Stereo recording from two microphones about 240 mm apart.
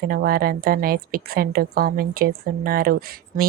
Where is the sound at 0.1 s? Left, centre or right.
Right.